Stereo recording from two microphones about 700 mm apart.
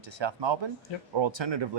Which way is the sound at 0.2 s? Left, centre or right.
Right.